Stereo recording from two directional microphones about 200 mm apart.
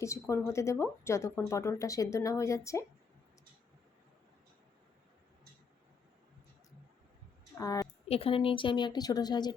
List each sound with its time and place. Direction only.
0.0 s speech: 15° left (ahead or behind)
7.6 s speech: 15° left (ahead or behind)
8.0 s a woman's voice: 30° left (ahead or behind)